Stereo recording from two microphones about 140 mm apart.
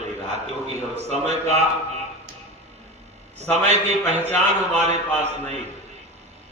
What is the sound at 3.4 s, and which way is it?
A man's voice, 50° right (ahead or behind).